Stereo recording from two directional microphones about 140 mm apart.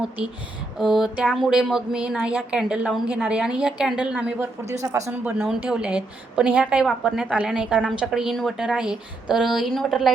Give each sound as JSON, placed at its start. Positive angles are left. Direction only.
{"t": 0.8, "sound": "a woman's voice", "side_deg": 0}
{"t": 4.7, "sound": "speech", "side_deg": -20}
{"t": 5.2, "sound": "a woman's voice", "side_deg": -10}